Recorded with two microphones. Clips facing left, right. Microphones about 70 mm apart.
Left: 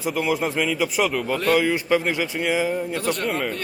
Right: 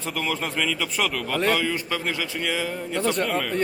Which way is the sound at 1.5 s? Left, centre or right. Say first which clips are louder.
Left 5 dB; centre.